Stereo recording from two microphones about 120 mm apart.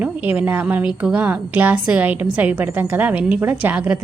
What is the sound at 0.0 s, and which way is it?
A woman's voice, 15° right (ahead or behind).